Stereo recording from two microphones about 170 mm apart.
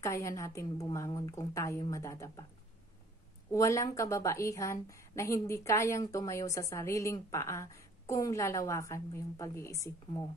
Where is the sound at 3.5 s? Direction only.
20° left (ahead or behind).